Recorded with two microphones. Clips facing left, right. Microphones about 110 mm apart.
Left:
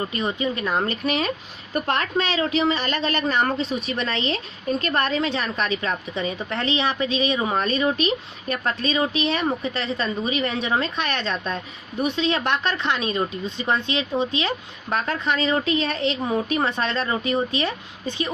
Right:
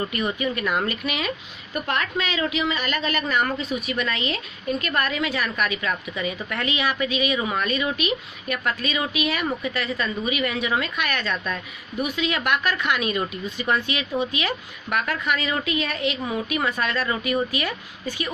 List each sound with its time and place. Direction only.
0.0 s speech: 25° left (ahead or behind)